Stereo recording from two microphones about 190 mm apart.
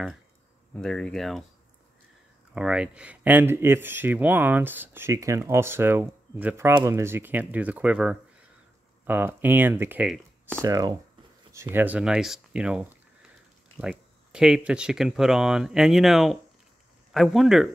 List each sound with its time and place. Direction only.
0.7 s speech: 5° left (ahead or behind)
2.5 s speech: 5° right (ahead or behind)
10.6 s speech: 20° right (ahead or behind); by 17.6 s centre (ahead or behind)